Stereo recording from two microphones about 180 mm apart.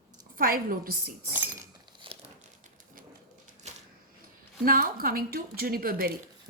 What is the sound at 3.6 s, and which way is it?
Typewriter, 40° right (ahead or behind).